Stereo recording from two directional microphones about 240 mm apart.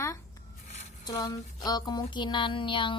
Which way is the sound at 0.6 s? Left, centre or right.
Left.